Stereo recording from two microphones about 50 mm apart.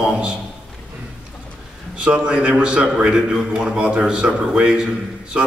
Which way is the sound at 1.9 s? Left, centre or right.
Right.